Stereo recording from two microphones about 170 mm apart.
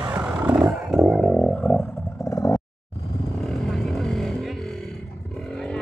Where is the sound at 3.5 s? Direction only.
Centre (ahead or behind).